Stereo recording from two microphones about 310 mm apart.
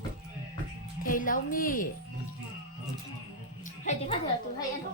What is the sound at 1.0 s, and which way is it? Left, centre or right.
Speech, left.